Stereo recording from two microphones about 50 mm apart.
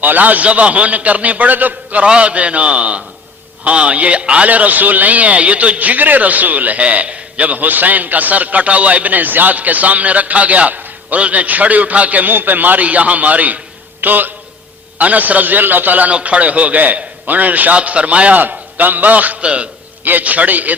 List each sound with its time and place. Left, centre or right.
0.0 s a man's voice: right
2.0 s a man's voice: right
20.1 s a man's voice: right